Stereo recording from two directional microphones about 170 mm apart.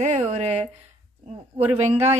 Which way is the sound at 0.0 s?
45° right (ahead or behind).